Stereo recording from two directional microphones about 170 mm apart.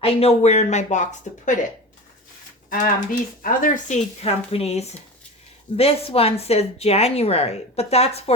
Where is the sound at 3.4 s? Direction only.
55° left (ahead or behind).